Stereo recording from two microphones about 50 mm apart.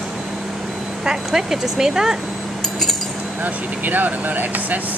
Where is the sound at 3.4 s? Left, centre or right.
Right.